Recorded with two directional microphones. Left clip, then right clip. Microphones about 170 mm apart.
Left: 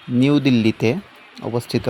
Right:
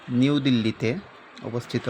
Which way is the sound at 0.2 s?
40° left (ahead or behind).